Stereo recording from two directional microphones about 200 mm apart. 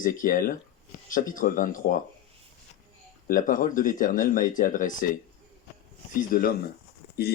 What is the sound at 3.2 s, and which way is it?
Speech, 45° left (ahead or behind).